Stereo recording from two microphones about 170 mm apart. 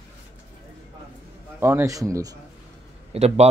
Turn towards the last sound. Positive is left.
turn(degrees=-40)  # may be behind; listen again after turning